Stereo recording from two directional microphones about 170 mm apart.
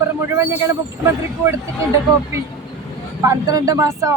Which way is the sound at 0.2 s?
15° right (ahead or behind).